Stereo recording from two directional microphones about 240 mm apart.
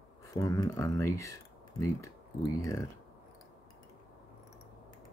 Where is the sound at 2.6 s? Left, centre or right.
Centre.